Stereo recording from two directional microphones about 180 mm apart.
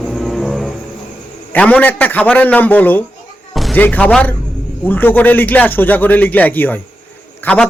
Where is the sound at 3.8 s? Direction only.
10° left (ahead or behind).